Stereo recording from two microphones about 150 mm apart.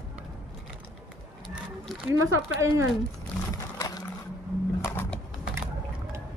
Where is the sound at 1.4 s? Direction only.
Centre (ahead or behind).